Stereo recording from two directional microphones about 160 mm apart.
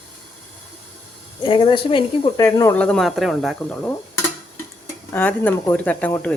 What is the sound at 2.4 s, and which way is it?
Speech, 20° left (ahead or behind).